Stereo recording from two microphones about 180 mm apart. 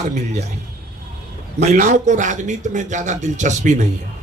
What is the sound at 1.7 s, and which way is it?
A man's voice, 45° right (ahead or behind).